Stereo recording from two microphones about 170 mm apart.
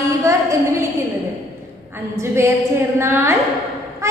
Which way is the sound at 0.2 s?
15° right (ahead or behind).